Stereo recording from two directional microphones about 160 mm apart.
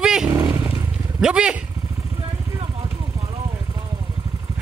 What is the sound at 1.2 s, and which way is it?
Speech, 5° right (ahead or behind).